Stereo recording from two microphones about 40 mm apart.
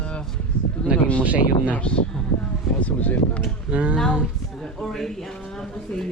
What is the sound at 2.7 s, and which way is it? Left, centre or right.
Speech, left.